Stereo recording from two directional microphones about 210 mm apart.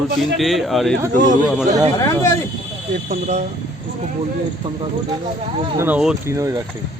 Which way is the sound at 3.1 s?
35° right (ahead or behind).